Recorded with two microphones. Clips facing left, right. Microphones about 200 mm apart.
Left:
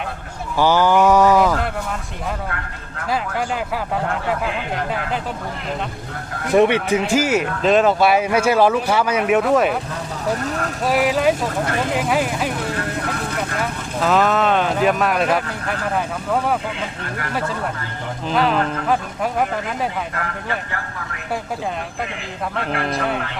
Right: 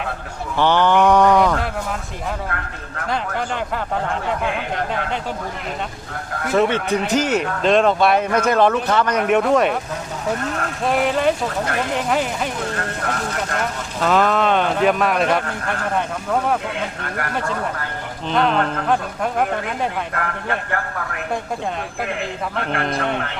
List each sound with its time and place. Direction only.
0.5 s speech: 5° left (ahead or behind)
3.1 s speech: 5° left (ahead or behind)
6.5 s speech: 15° left (ahead or behind)
10.8 s speech: 5° left (ahead or behind)
13.6 s speech: centre (ahead or behind)
17.0 s speech: 55° right (ahead or behind)
18.3 s speech: 5° left (ahead or behind)
20.1 s speech: 55° right (ahead or behind)
22.7 s speech: 5° left (ahead or behind)